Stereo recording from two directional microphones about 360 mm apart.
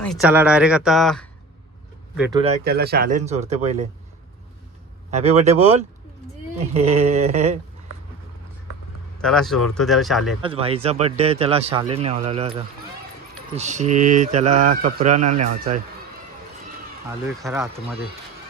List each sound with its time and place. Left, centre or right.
0.0 s speech: centre
2.4 s speech: right
5.1 s speech: centre
9.1 s speech: centre
10.4 s speech: centre
17.1 s speech: centre